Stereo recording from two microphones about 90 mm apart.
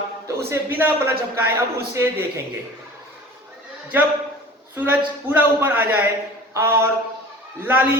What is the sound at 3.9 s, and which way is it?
A man's voice, 20° right (ahead or behind).